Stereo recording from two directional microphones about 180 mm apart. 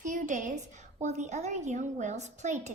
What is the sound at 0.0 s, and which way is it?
A woman's voice, 45° right (ahead or behind).